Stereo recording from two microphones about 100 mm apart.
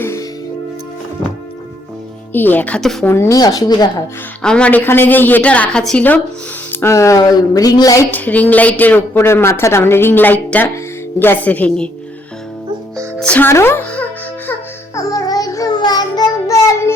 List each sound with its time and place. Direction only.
0.0 s music: 30° left (ahead or behind)
2.3 s a woman's voice: 20° left (ahead or behind)
3.1 s a woman's voice: 30° left (ahead or behind)
4.4 s a woman's voice: 10° left (ahead or behind)
6.7 s a woman's voice: 30° left (ahead or behind)
8.1 s a woman's voice: 15° left (ahead or behind)
9.1 s a woman's voice: 25° left (ahead or behind)
13.1 s music: 10° left (ahead or behind)
13.4 s a woman's voice: 25° left (ahead or behind)
14.9 s child singing: 35° left (ahead or behind)